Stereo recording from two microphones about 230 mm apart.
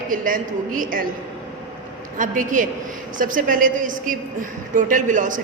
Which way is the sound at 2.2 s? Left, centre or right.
Right.